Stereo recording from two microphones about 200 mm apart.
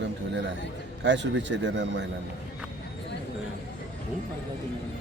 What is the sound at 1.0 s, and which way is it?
Speech, 65° right (ahead or behind).